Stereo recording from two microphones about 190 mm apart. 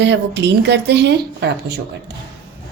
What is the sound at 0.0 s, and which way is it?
A woman's voice, 65° right (ahead or behind).